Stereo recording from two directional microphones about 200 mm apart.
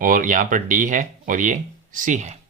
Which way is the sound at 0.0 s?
45° right (ahead or behind).